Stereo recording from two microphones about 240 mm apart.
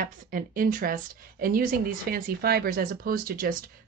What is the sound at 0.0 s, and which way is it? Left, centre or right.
A woman's voice, right.